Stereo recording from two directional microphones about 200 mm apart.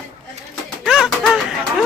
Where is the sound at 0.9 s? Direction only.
Centre (ahead or behind).